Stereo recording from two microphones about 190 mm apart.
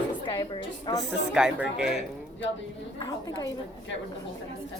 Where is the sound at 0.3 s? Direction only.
25° left (ahead or behind).